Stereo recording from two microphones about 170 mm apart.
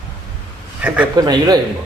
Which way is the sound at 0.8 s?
10° right (ahead or behind).